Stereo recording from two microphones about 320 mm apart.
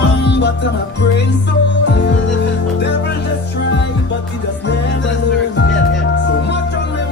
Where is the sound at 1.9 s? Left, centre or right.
Left.